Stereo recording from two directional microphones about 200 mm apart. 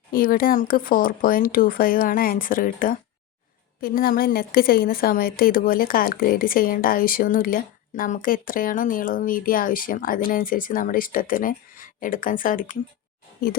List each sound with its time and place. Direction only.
0.1 s a woman's voice: 45° left (ahead or behind)